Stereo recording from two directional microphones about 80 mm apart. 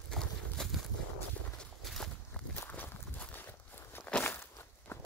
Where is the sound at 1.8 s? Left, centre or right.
Centre.